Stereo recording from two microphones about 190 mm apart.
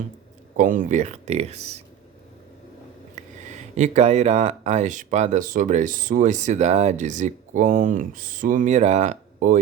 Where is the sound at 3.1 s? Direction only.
40° right (ahead or behind).